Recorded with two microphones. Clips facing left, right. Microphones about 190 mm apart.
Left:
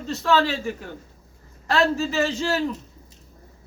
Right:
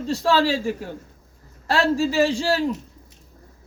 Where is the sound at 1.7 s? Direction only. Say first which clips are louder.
Right 1 dB; 35° right (ahead or behind).